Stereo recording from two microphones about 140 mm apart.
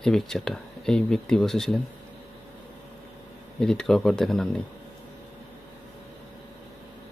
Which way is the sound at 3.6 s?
5° left (ahead or behind).